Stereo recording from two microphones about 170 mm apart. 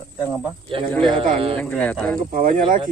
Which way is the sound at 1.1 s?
30° right (ahead or behind).